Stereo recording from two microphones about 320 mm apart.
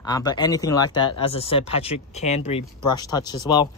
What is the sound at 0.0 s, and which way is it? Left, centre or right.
Speech, centre.